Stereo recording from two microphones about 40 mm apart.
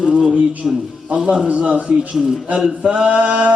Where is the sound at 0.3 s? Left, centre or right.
Right.